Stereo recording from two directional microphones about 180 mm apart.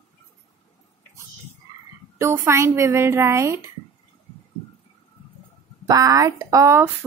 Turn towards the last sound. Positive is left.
turn(degrees=-15)  # may be behind; listen again after turning